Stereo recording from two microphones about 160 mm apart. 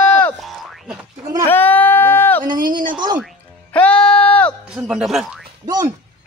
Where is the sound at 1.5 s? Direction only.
10° left (ahead or behind).